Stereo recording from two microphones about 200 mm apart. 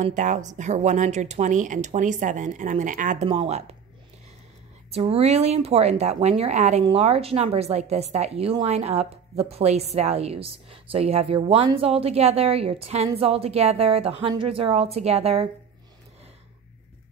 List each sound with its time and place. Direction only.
0.0 s speech: 40° right (ahead or behind)
4.9 s a woman's voice: 30° right (ahead or behind)